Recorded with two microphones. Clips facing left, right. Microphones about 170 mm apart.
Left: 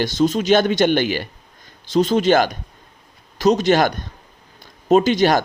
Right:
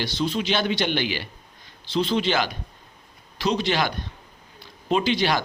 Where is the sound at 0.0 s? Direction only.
45° left (ahead or behind).